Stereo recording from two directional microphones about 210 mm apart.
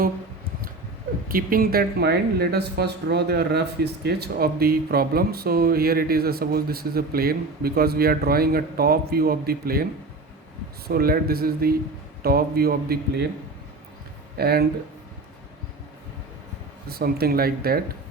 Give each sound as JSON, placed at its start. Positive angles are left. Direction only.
{"t": 1.3, "sound": "speech", "side_deg": -45}
{"t": 10.8, "sound": "speech", "side_deg": -45}
{"t": 14.3, "sound": "speech", "side_deg": -50}
{"t": 16.9, "sound": "speech", "side_deg": -45}